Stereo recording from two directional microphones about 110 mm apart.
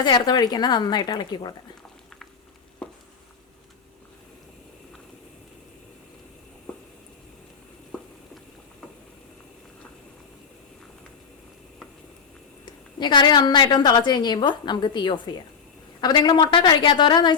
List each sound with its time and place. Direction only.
0.0 s a woman's voice: 40° left (ahead or behind)
2.8 s a sound: 10° left (ahead or behind)
12.6 s a woman's voice: 45° left (ahead or behind)